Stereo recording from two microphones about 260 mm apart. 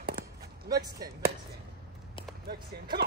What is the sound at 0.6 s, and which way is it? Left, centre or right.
Speech, centre.